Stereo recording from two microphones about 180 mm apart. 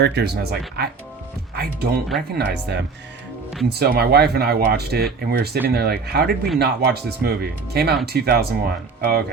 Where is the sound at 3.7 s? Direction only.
60° right (ahead or behind).